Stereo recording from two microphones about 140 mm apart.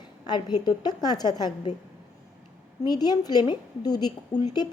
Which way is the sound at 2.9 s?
30° left (ahead or behind).